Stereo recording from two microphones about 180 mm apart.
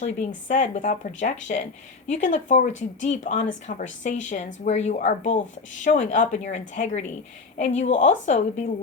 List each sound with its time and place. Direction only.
0.0 s speech: 45° left (ahead or behind)